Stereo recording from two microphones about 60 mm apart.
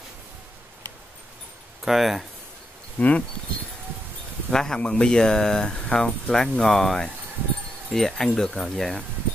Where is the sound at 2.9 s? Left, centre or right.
Left.